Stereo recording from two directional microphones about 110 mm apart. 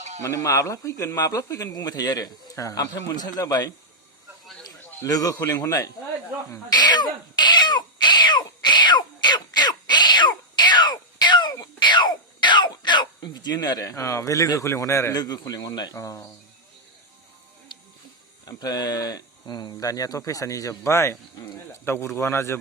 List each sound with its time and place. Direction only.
0.2 s a man's voice: 25° left (ahead or behind)
5.0 s speech: 35° left (ahead or behind)
6.5 s crying: 40° left (ahead or behind)
11.5 s a sound: 40° left (ahead or behind); by 15.2 s 25° left (ahead or behind)
15.2 s speech: 35° left (ahead or behind)
16.0 s a man's voice: 25° left (ahead or behind)
17.7 s music: 45° left (ahead or behind)
18.4 s a man's voice: 35° left (ahead or behind)